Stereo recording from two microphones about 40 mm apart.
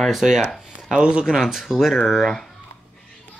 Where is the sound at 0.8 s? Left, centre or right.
Centre.